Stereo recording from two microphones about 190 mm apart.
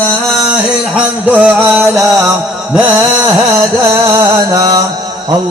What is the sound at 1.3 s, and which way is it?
Music, 5° right (ahead or behind).